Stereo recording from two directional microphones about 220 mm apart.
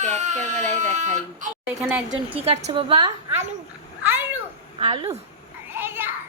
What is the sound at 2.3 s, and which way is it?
A woman's voice, 25° right (ahead or behind).